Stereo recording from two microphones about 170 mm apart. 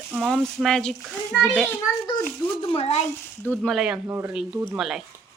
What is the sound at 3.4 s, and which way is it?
Speech, 5° left (ahead or behind).